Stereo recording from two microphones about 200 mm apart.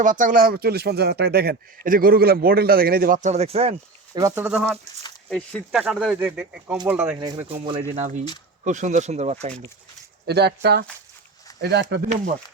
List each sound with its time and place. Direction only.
0.0 s a man's voice: 40° right (ahead or behind)
3.2 s speech: 35° right (ahead or behind)
4.2 s speech: 15° right (ahead or behind)
4.4 s speech: centre (ahead or behind)
7.2 s speech: 20° right (ahead or behind)
10.2 s speech: 55° right (ahead or behind)